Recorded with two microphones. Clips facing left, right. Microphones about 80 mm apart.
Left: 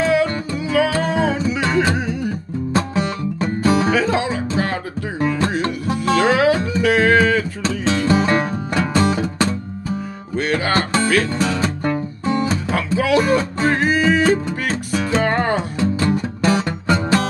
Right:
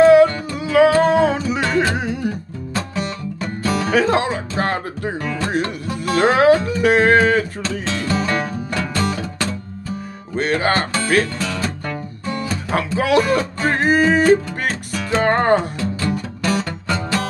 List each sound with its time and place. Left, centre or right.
0.0 s music: right
2.7 s music: left
3.9 s music: right
5.6 s music: left
6.1 s music: right
7.8 s music: left
10.3 s music: right
11.3 s music: left
12.7 s music: right
13.2 s music: left
13.7 s music: right
15.8 s music: left